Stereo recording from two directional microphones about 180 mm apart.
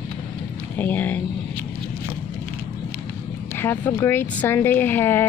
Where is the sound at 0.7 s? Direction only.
10° left (ahead or behind).